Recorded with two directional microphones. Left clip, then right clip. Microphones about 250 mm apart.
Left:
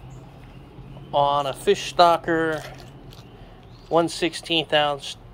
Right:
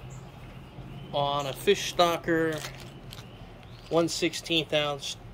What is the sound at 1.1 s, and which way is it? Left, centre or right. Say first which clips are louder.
Speech: left 8 dB; centre.